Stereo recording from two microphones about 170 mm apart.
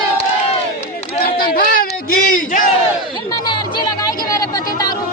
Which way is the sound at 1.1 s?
60° left (ahead or behind).